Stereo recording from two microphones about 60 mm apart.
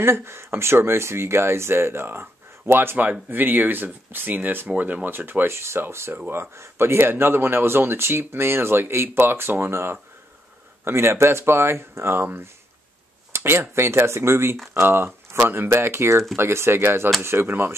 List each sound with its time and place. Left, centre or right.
0.0 s speech: right
13.3 s speech: right